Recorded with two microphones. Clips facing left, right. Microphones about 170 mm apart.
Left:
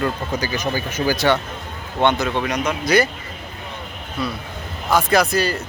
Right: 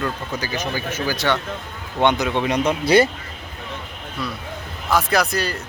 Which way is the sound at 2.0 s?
15° right (ahead or behind).